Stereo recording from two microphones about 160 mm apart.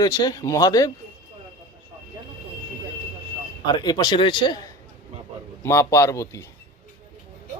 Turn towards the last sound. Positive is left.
turn(degrees=20)  # may be behind; listen again after turning